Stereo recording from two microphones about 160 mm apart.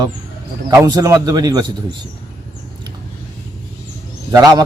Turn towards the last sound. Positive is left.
turn(degrees=-25)  # may be behind; listen again after turning